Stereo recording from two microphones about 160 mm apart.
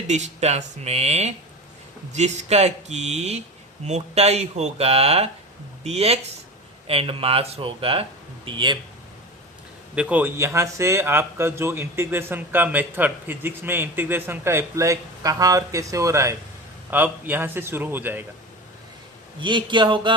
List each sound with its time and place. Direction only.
0.1 s speech: 45° right (ahead or behind)
9.9 s speech: 10° right (ahead or behind)
19.4 s speech: 30° right (ahead or behind)